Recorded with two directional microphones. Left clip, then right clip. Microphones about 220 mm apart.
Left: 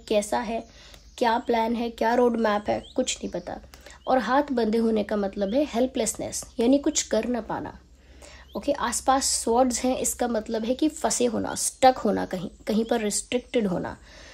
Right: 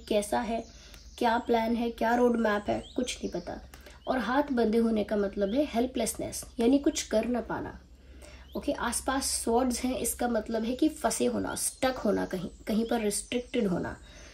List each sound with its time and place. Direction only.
0.1 s speech: 35° left (ahead or behind)
8.6 s speech: 40° left (ahead or behind)